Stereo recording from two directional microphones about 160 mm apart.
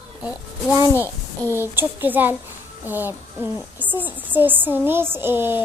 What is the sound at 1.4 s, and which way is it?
Speech, 15° right (ahead or behind).